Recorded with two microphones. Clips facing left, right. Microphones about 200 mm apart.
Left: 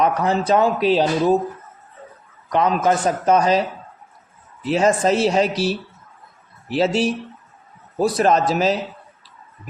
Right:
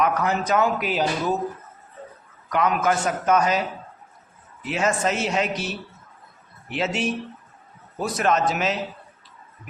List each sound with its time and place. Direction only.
0.0 s speech: 30° left (ahead or behind)
2.5 s speech: 30° left (ahead or behind)